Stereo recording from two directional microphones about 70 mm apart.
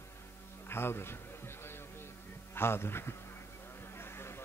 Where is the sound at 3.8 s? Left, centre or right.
Left.